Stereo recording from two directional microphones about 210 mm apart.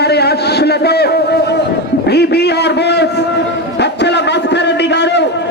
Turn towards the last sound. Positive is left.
turn(degrees=55)  # may be behind; listen again after turning